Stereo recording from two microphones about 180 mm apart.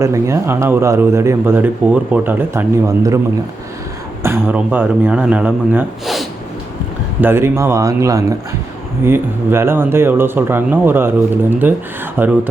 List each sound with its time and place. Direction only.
0.0 s a man's voice: 15° right (ahead or behind)
4.2 s a man's voice: 10° right (ahead or behind)